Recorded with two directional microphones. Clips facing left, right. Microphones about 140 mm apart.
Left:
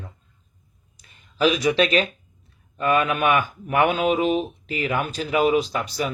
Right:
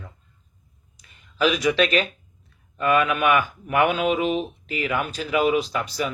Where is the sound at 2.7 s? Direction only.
35° left (ahead or behind).